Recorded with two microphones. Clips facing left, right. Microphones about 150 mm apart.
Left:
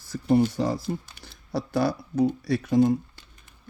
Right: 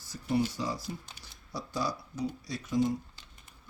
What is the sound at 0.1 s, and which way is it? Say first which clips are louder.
Speech: left 9 dB; 55° left (ahead or behind).